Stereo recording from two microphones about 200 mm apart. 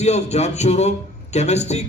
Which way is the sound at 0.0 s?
35° left (ahead or behind).